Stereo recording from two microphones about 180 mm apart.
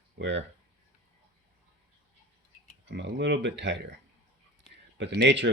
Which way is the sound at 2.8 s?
75° right (ahead or behind).